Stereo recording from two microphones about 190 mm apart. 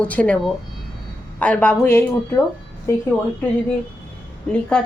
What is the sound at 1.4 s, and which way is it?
Speech, 5° left (ahead or behind).